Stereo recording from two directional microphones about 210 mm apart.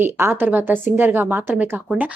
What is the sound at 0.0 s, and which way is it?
Speech, 10° right (ahead or behind).